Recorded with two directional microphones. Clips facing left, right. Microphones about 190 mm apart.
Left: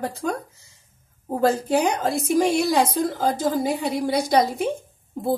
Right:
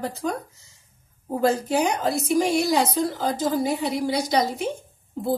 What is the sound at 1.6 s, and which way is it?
A woman's voice, 55° left (ahead or behind).